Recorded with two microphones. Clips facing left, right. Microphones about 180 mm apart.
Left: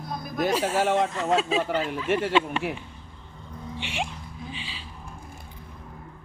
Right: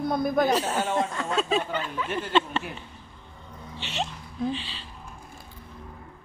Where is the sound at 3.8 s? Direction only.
10° left (ahead or behind).